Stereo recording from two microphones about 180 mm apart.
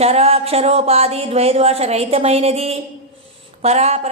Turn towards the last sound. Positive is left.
turn(degrees=-35)  # may be behind; listen again after turning